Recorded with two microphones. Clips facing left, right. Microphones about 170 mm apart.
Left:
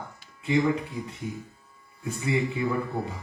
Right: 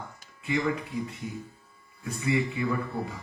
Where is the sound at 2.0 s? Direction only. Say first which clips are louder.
Left 1 dB; 25° left (ahead or behind).